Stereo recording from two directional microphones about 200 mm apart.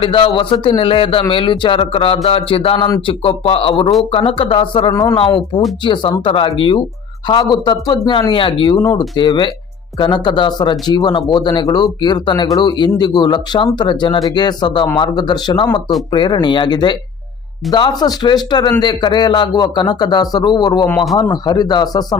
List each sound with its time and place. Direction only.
0.0 s speech: 25° left (ahead or behind)
20.9 s a man's voice: centre (ahead or behind)
21.2 s speech: 20° left (ahead or behind)